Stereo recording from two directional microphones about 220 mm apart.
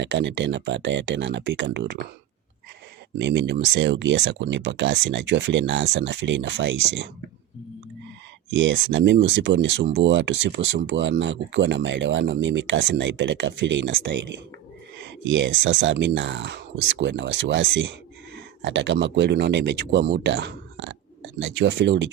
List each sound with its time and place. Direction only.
0.0 s speech: 55° right (ahead or behind)
3.2 s speech: 55° right (ahead or behind)
8.4 s speech: 55° right (ahead or behind)